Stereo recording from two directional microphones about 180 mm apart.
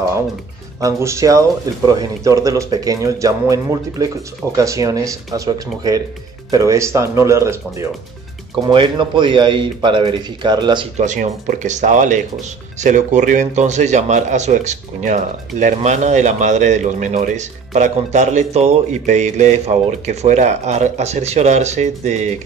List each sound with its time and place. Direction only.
0.7 s a man's voice: 15° right (ahead or behind)
11.0 s speech: 40° right (ahead or behind)